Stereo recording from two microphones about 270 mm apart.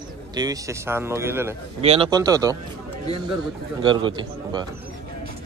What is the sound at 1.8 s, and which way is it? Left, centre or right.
Speech, right.